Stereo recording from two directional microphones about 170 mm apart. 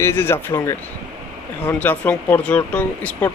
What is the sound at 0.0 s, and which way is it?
Speech, 15° left (ahead or behind).